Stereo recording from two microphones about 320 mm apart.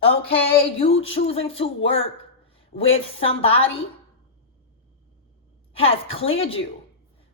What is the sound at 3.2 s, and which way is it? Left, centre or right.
Speech, centre.